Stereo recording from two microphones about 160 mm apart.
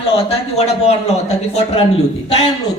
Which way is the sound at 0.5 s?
40° left (ahead or behind).